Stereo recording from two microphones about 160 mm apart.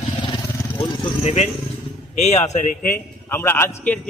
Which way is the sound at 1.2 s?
40° left (ahead or behind).